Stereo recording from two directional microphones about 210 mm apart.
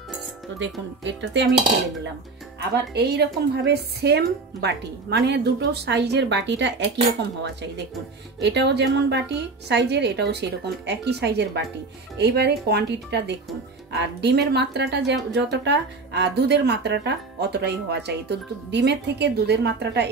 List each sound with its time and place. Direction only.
0.6 s speech: 60° right (ahead or behind)
2.7 s speech: 50° right (ahead or behind)
8.4 s speech: 55° right (ahead or behind)